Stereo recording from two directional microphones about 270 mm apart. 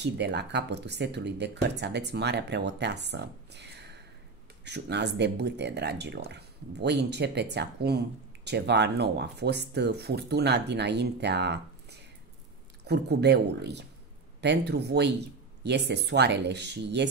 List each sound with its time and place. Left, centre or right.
0.0 s speech: right